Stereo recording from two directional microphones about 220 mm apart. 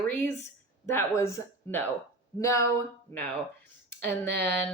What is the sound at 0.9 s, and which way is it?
Speech, 10° left (ahead or behind).